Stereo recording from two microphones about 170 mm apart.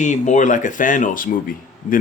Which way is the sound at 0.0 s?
45° left (ahead or behind).